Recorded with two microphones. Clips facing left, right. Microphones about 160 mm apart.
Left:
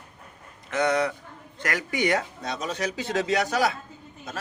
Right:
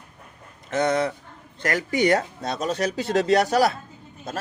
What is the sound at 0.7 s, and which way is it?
A man's voice, 40° right (ahead or behind).